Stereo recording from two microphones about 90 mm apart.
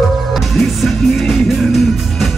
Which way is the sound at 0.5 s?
Centre (ahead or behind).